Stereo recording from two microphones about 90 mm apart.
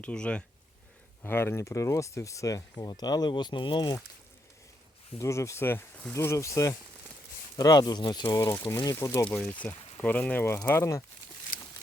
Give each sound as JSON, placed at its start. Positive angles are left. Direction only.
{"t": 0.0, "sound": "speech", "side_deg": 10}
{"t": 1.2, "sound": "speech", "side_deg": 25}
{"t": 2.7, "sound": "speech", "side_deg": 50}
{"t": 5.2, "sound": "speech", "side_deg": 35}
{"t": 9.4, "sound": "speech", "side_deg": 15}